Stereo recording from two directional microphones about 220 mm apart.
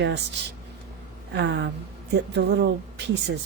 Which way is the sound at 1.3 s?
50° right (ahead or behind).